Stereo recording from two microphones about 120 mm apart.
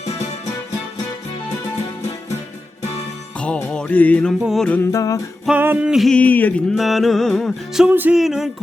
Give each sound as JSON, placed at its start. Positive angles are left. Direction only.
{"t": 3.4, "sound": "music", "side_deg": 10}
{"t": 4.4, "sound": "music", "side_deg": 0}
{"t": 4.7, "sound": "music", "side_deg": 20}
{"t": 5.5, "sound": "music", "side_deg": -15}
{"t": 6.1, "sound": "a sound", "side_deg": 10}
{"t": 6.7, "sound": "music", "side_deg": 0}
{"t": 7.9, "sound": "music", "side_deg": -15}
{"t": 8.1, "sound": "music", "side_deg": -5}